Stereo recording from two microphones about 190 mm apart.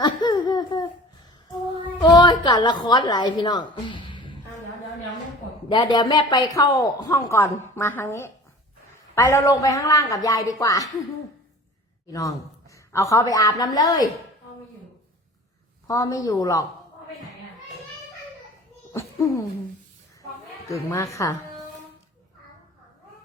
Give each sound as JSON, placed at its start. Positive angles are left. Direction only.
{"t": 0.0, "sound": "a sound", "side_deg": 20}
{"t": 2.0, "sound": "a woman's voice", "side_deg": 25}
{"t": 5.7, "sound": "speech", "side_deg": 20}
{"t": 12.1, "sound": "speech", "side_deg": 20}
{"t": 15.9, "sound": "speech", "side_deg": 15}
{"t": 18.9, "sound": "a sound", "side_deg": 15}
{"t": 20.9, "sound": "speech", "side_deg": 15}